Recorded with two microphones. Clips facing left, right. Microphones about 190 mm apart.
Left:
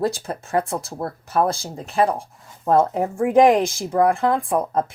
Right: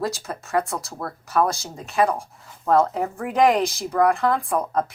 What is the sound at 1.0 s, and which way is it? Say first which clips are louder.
Speech: even; 25° left (ahead or behind).